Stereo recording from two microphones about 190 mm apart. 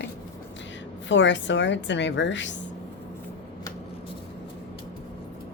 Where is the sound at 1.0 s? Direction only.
75° left (ahead or behind).